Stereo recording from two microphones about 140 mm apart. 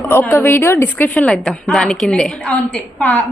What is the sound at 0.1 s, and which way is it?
A woman's voice, 15° left (ahead or behind).